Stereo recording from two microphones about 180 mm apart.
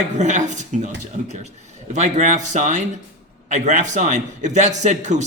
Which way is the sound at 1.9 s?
40° right (ahead or behind).